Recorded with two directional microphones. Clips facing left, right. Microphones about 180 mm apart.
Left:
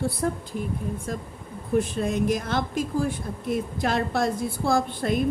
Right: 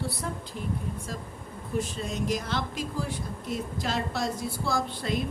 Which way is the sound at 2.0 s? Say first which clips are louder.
Left 6 dB; 55° left (ahead or behind).